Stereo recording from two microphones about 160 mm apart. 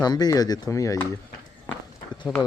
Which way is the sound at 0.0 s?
25° left (ahead or behind).